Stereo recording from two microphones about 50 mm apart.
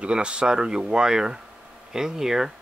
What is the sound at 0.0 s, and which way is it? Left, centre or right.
Speech, centre.